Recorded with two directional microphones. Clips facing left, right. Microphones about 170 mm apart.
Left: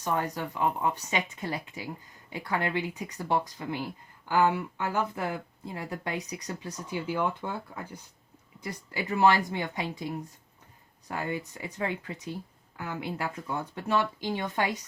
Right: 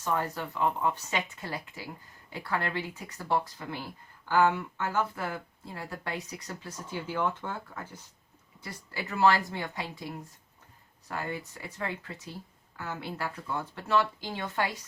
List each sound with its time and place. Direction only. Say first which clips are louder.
0.0 s speech: left 1 dB; 15° left (ahead or behind)